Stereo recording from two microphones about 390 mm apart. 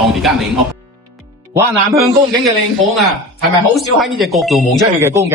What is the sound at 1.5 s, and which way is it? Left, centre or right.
Speech, centre.